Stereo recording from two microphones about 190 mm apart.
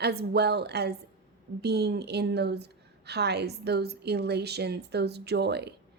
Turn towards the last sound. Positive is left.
turn(degrees=-60)  # may be behind; listen again after turning